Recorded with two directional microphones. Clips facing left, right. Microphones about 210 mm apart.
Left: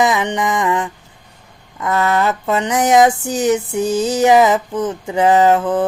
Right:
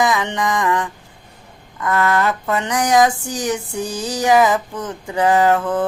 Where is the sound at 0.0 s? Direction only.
20° left (ahead or behind).